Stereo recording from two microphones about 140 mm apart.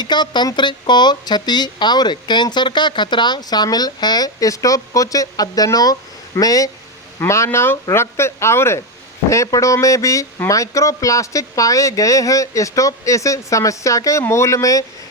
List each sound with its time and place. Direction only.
0.0 s speech: 30° left (ahead or behind)